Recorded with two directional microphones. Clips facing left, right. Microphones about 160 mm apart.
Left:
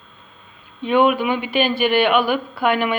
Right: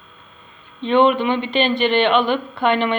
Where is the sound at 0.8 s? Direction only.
10° left (ahead or behind).